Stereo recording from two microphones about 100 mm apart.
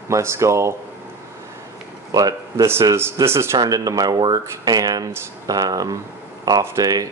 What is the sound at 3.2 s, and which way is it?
Speech, 25° right (ahead or behind).